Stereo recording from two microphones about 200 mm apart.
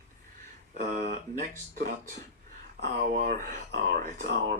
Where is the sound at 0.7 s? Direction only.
40° right (ahead or behind).